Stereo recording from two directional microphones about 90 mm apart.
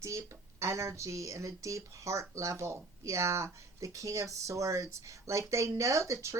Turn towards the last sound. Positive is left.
turn(degrees=-35)  # may be behind; listen again after turning